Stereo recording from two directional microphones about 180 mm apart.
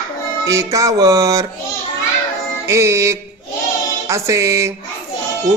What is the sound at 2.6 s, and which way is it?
Music, 15° right (ahead or behind).